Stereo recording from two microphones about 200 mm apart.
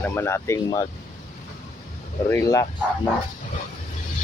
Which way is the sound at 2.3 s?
15° left (ahead or behind).